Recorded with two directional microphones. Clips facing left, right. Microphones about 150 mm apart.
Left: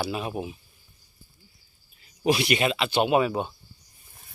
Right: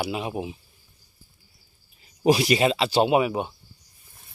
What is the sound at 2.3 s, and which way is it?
Speech, 35° right (ahead or behind).